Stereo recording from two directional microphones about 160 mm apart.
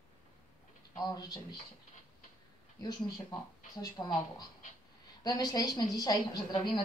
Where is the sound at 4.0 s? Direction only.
20° left (ahead or behind).